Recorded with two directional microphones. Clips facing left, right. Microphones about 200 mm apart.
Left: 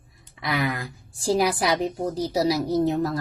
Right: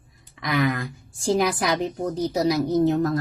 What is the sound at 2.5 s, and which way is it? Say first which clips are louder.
Speech: right 4 dB; 30° left (ahead or behind).